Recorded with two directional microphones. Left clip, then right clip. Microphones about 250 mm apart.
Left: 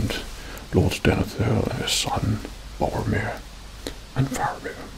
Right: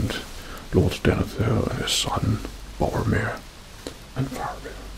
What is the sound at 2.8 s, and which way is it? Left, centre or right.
Speech, right.